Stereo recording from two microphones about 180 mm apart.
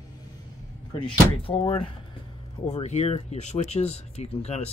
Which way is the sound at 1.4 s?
30° left (ahead or behind).